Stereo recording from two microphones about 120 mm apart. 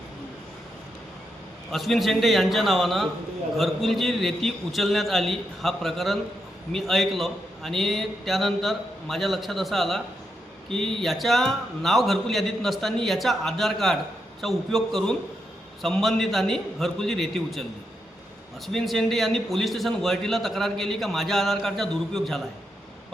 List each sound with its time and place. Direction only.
1.7 s a man's voice: centre (ahead or behind)